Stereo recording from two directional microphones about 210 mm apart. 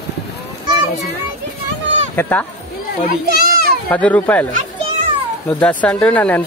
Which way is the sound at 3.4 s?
50° right (ahead or behind).